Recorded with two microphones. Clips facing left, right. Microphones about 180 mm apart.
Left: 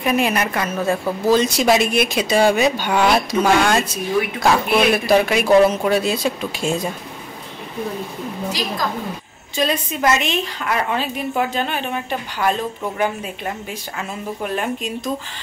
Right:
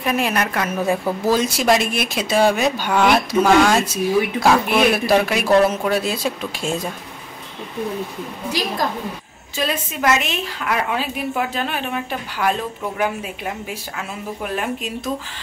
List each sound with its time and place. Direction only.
0.0 s a woman's voice: centre (ahead or behind)
9.6 s a woman's voice: 5° right (ahead or behind)